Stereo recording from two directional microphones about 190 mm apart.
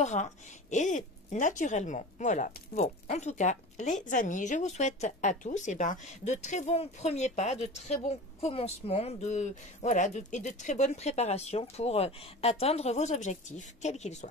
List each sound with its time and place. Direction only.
0.0 s speech: 40° left (ahead or behind)